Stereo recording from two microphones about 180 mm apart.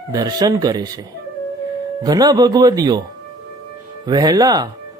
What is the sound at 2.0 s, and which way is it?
Speech, 20° right (ahead or behind).